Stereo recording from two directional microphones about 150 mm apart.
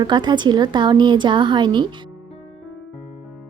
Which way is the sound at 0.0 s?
30° right (ahead or behind).